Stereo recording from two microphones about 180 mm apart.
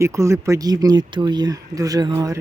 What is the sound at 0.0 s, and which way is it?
Speech, 15° right (ahead or behind).